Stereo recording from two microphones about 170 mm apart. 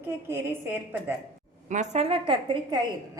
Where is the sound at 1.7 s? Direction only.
40° right (ahead or behind).